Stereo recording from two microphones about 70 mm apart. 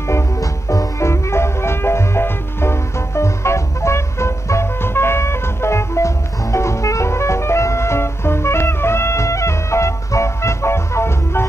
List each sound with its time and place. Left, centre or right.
0.1 s music: left